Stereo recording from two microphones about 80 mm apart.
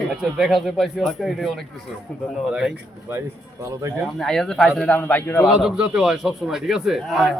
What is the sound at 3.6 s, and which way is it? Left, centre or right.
Speech, right.